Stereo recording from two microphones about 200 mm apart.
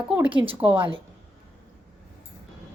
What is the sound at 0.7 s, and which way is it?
Speech, 25° right (ahead or behind).